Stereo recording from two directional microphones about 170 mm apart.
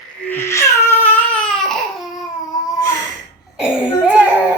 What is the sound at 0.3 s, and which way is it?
Baby cry, 15° left (ahead or behind).